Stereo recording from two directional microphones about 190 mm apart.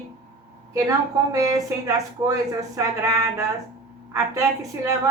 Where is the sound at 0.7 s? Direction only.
15° right (ahead or behind).